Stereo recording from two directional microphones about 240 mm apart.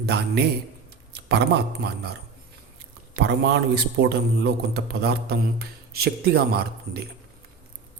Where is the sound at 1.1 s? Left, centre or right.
Right.